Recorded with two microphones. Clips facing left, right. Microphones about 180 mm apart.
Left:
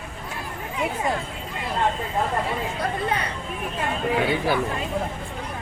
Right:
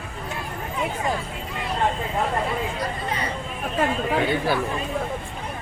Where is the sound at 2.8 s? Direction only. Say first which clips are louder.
Left 3 dB; 60° left (ahead or behind).